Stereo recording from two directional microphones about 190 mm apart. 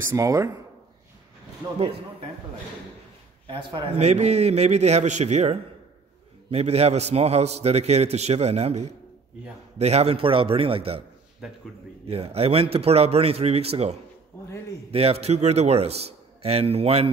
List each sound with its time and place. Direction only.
0.0 s speech: 15° right (ahead or behind)
3.4 s a man's voice: 25° right (ahead or behind)
4.0 s a man's voice: 35° right (ahead or behind)
11.4 s a man's voice: centre (ahead or behind)
12.1 s a man's voice: 30° right (ahead or behind)